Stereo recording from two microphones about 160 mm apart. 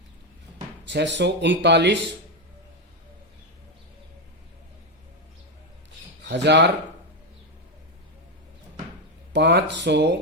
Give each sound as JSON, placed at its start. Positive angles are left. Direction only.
{"t": 0.9, "sound": "speech", "side_deg": -90}
{"t": 6.2, "sound": "speech", "side_deg": -90}
{"t": 9.3, "sound": "speech", "side_deg": -90}